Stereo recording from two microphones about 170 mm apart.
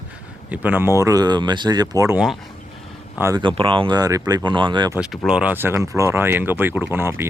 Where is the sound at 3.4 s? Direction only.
30° right (ahead or behind).